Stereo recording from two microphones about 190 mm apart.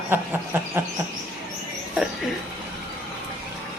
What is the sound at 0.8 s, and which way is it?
Speech, 10° right (ahead or behind).